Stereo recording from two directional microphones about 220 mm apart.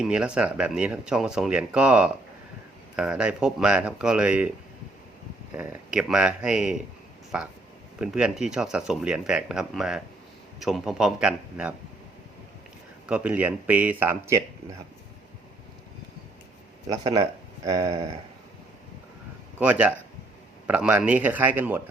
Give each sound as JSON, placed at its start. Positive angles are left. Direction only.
{"t": 0.0, "sound": "speech", "side_deg": -5}
{"t": 5.5, "sound": "speech", "side_deg": -5}
{"t": 7.9, "sound": "speech", "side_deg": -5}
{"t": 13.1, "sound": "speech", "side_deg": -5}
{"t": 16.8, "sound": "speech", "side_deg": -15}
{"t": 19.5, "sound": "speech", "side_deg": -5}